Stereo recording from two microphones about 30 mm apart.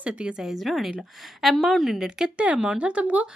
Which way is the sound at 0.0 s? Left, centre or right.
Right.